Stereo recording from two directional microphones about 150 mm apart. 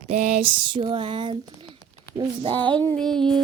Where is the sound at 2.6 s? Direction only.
10° left (ahead or behind).